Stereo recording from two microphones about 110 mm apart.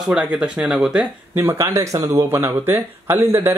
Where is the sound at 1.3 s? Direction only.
20° right (ahead or behind).